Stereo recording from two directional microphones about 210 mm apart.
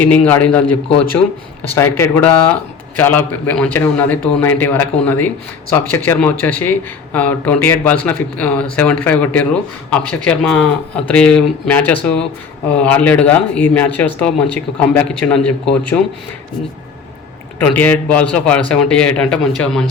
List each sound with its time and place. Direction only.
0.0 s speech: 10° left (ahead or behind)
17.6 s speech: 10° left (ahead or behind)